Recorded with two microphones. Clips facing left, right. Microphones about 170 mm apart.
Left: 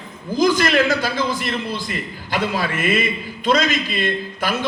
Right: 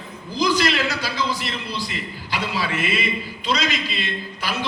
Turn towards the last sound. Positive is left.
turn(degrees=50)  # may be behind; listen again after turning